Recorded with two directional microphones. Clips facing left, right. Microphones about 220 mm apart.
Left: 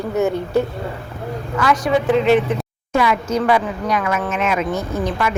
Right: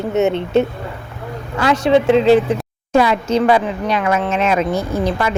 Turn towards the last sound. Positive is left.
turn(degrees=-30)  # may be behind; listen again after turning